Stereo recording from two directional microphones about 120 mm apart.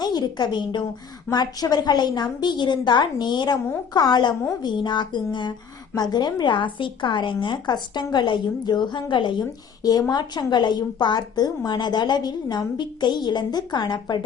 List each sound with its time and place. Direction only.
0.0 s a woman's voice: 35° left (ahead or behind)